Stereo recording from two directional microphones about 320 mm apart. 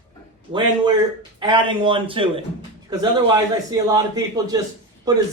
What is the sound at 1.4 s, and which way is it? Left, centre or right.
A man's voice, centre.